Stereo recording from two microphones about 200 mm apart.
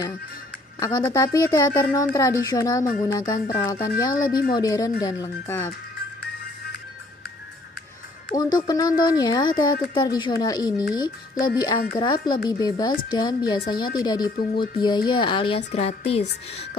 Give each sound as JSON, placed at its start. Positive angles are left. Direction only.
{"t": 0.7, "sound": "a child's voice", "side_deg": 20}
{"t": 8.4, "sound": "speech", "side_deg": 20}